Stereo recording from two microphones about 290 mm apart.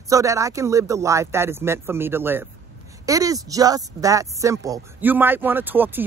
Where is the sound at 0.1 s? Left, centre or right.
Centre.